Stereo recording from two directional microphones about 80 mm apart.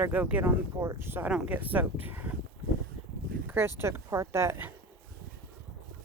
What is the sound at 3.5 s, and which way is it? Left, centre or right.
Speech, right.